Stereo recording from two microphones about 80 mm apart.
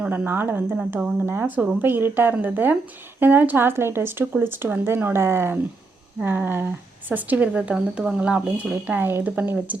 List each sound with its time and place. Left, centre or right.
0.1 s speech: right
8.7 s speech: right